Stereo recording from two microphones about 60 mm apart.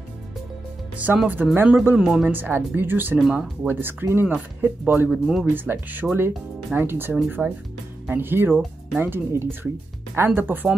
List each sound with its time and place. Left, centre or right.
0.9 s speech: right
2.0 s speech: centre
2.2 s speech: right
3.2 s speech: centre
3.6 s speech: right
5.1 s speech: centre
5.5 s speech: right
7.4 s speech: centre
8.1 s speech: right